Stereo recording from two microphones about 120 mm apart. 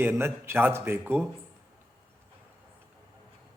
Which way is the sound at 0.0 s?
20° right (ahead or behind).